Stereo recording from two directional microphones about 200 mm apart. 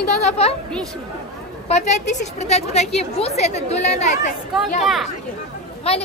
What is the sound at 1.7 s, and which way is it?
A woman's voice, 35° left (ahead or behind).